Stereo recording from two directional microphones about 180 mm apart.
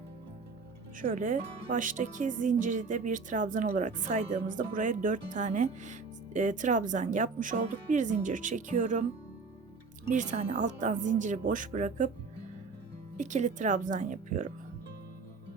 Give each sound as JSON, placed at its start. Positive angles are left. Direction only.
{"t": 1.1, "sound": "speech", "side_deg": -45}
{"t": 10.1, "sound": "speech", "side_deg": -40}
{"t": 13.1, "sound": "speech", "side_deg": -45}